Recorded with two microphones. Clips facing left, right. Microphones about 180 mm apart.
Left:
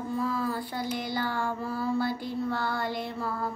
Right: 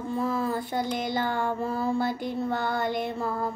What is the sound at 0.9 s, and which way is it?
Child singing, 20° right (ahead or behind).